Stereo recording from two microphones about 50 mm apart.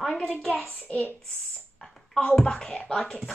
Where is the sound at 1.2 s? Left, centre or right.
Centre.